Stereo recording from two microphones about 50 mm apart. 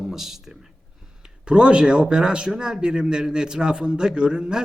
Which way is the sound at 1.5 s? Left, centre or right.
Centre.